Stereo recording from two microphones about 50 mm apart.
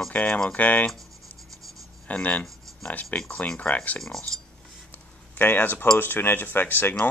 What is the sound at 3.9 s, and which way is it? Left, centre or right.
Speech, centre.